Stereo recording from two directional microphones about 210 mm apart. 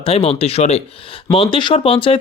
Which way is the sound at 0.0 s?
30° left (ahead or behind).